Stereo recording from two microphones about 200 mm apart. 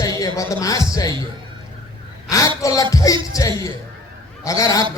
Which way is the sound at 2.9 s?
15° left (ahead or behind).